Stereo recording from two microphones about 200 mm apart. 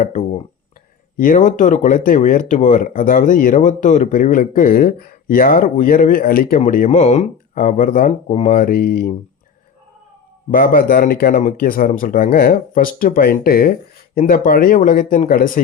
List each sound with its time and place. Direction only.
0.0 s speech: 35° left (ahead or behind)
10.5 s speech: 45° left (ahead or behind)